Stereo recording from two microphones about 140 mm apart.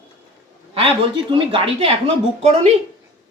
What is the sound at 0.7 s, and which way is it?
A woman's voice, 40° right (ahead or behind).